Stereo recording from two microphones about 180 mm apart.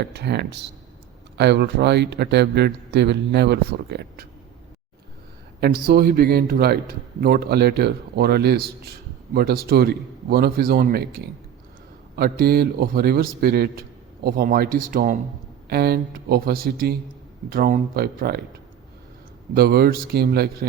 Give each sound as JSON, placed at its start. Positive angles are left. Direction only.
{"t": 0.0, "sound": "speech", "side_deg": -65}
{"t": 5.8, "sound": "speech", "side_deg": -60}
{"t": 19.5, "sound": "speech", "side_deg": -60}